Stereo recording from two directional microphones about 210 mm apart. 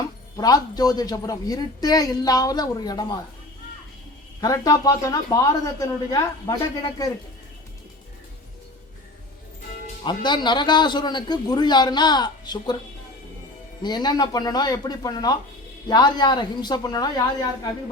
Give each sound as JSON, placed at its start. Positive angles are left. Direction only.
{"t": 0.3, "sound": "a woman's voice", "side_deg": 20}
{"t": 4.4, "sound": "a woman's voice", "side_deg": 20}
{"t": 10.0, "sound": "a man's voice", "side_deg": 20}
{"t": 13.8, "sound": "a man's voice", "side_deg": 20}